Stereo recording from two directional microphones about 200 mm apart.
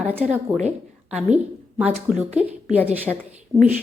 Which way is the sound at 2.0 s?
5° right (ahead or behind).